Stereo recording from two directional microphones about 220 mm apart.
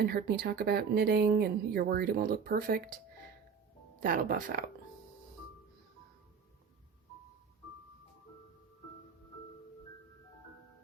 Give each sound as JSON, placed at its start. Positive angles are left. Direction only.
{"t": 0.0, "sound": "speech", "side_deg": -45}
{"t": 4.0, "sound": "speech", "side_deg": -40}